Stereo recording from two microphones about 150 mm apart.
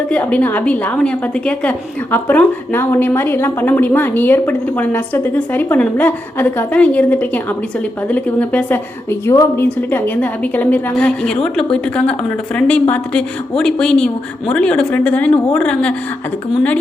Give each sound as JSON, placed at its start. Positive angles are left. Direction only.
{"t": 0.1, "sound": "a woman's voice", "side_deg": 10}